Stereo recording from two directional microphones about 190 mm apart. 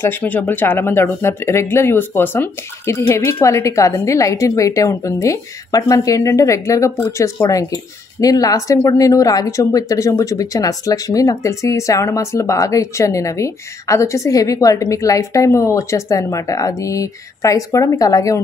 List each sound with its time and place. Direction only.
0.0 s speech: 10° left (ahead or behind)